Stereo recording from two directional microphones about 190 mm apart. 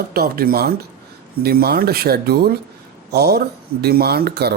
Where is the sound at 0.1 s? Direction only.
55° right (ahead or behind).